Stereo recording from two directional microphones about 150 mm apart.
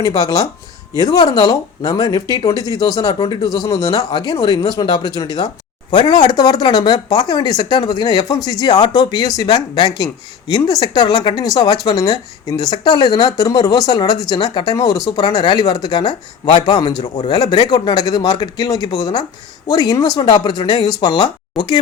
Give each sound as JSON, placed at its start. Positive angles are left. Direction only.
{"t": 0.0, "sound": "speech", "side_deg": 25}